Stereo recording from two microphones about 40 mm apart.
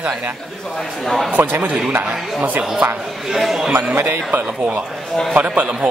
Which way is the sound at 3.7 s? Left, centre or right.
Right.